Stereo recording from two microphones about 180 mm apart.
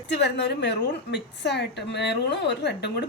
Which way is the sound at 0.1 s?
70° left (ahead or behind).